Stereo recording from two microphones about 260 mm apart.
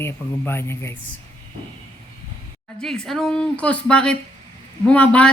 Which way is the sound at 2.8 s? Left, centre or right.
Centre.